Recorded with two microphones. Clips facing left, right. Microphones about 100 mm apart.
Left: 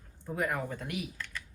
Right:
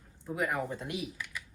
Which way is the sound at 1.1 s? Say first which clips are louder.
Even; 10° right (ahead or behind).